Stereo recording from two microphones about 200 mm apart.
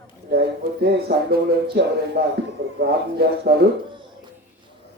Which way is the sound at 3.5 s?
50° right (ahead or behind).